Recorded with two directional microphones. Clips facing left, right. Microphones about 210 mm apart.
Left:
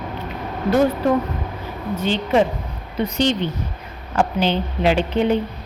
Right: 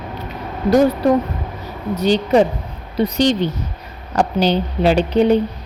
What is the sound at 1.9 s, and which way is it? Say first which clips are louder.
A woman's voice: right 4 dB; 40° right (ahead or behind).